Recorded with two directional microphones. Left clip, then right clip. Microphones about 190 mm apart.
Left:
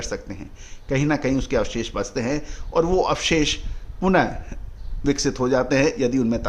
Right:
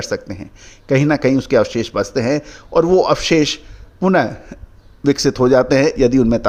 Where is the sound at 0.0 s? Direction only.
25° right (ahead or behind).